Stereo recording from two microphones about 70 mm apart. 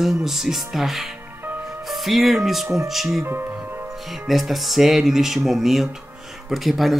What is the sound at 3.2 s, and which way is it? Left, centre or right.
Music, right.